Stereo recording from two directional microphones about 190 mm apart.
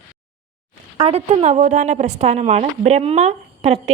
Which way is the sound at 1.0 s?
30° right (ahead or behind).